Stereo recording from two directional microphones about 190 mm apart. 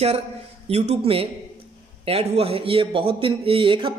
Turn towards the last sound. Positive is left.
turn(degrees=-25)  # may be behind; listen again after turning